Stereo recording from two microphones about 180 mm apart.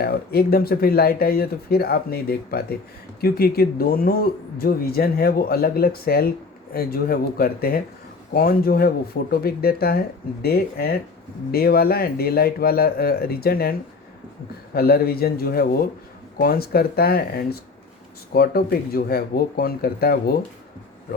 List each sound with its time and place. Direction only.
0.0 s speech: 60° left (ahead or behind)